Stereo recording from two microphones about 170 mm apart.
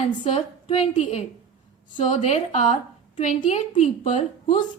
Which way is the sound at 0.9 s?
45° left (ahead or behind).